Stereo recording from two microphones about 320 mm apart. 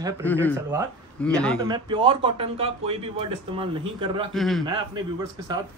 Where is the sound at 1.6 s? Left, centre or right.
Centre.